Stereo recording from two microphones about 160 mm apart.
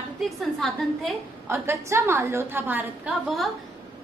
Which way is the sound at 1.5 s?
15° right (ahead or behind).